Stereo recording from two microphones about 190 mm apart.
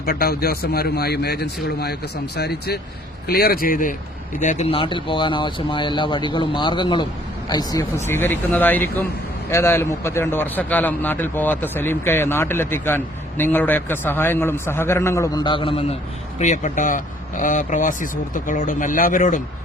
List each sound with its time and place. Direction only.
0.0 s a man's voice: 55° left (ahead or behind); by 16.0 s 30° left (ahead or behind)
16.4 s speech: 40° left (ahead or behind)